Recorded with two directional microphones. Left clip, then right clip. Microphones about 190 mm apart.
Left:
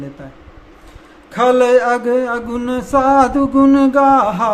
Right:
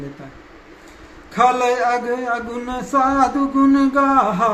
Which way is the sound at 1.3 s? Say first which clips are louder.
Left 5 dB; 50° left (ahead or behind).